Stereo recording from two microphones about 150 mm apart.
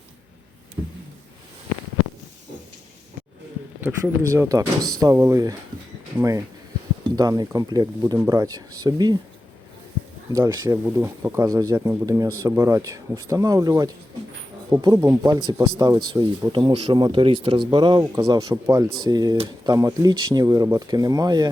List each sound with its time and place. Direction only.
3.8 s speech: 15° right (ahead or behind)
10.3 s speech: 25° right (ahead or behind)